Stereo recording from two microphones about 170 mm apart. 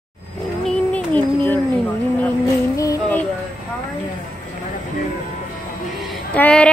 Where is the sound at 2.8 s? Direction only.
15° left (ahead or behind).